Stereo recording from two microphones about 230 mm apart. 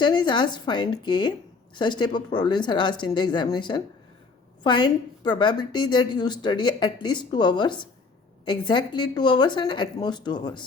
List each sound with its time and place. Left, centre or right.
0.0 s a woman's voice: centre